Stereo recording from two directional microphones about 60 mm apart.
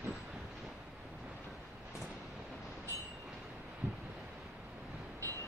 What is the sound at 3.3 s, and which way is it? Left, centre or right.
Wind chime, centre.